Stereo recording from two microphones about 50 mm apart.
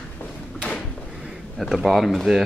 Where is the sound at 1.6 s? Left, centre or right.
Centre.